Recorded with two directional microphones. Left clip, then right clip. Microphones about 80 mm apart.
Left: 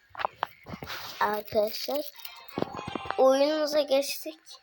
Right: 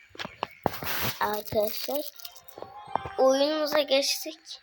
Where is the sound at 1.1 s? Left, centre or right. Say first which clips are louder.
Left 4 dB; left.